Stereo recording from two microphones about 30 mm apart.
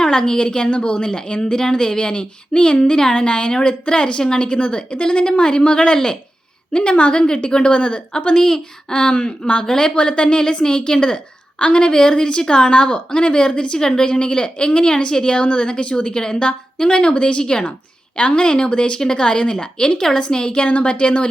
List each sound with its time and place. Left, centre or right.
0.0 s a woman's voice: left
9.9 s a woman's voice: left
11.6 s a woman's voice: left
11.9 s a woman's voice: left
13.7 s a woman's voice: left
20.0 s a woman's voice: centre
20.4 s a woman's voice: left
20.7 s speech: left
20.9 s a woman's voice: left